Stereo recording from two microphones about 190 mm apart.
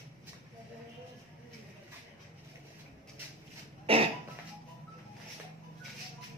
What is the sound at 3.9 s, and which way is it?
Cough, 30° right (ahead or behind).